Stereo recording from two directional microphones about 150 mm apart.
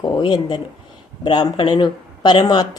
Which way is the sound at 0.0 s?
30° left (ahead or behind).